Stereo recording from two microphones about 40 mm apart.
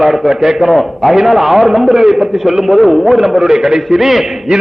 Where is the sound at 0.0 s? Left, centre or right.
Centre.